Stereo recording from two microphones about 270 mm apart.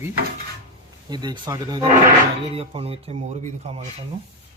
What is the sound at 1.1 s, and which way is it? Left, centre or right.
Speech, centre.